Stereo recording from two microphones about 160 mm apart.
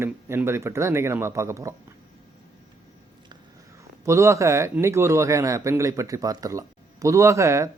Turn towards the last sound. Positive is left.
turn(degrees=-20)  # may be behind; listen again after turning